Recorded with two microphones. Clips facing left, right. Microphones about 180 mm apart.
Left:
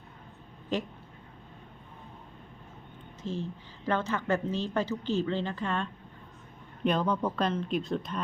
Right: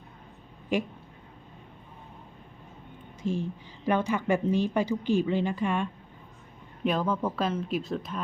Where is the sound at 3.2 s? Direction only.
15° right (ahead or behind).